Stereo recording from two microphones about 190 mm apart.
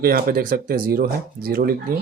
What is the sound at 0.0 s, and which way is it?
Speech, 50° right (ahead or behind).